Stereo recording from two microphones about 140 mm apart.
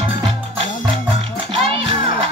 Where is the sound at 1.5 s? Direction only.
40° right (ahead or behind).